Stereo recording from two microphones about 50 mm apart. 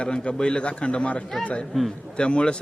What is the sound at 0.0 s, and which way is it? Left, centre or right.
A man's voice, centre.